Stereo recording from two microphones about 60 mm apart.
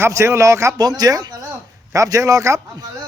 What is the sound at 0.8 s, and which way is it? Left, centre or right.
Speech, right.